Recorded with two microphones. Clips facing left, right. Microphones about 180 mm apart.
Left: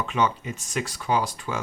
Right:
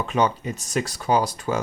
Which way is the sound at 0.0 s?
40° right (ahead or behind).